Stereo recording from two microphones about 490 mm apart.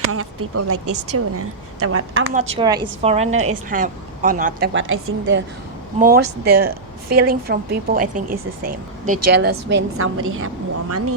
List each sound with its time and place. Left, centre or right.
0.1 s a woman's voice: right
2.6 s speech: centre
3.2 s a woman's voice: right